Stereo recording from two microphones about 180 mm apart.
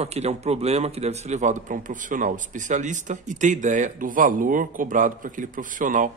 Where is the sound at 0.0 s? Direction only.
35° right (ahead or behind).